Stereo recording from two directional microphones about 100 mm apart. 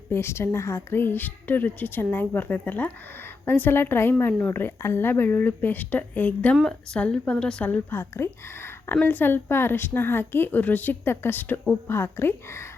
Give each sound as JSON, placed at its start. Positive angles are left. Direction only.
{"t": 0.1, "sound": "a woman's voice", "side_deg": 25}
{"t": 7.7, "sound": "a woman's voice", "side_deg": 20}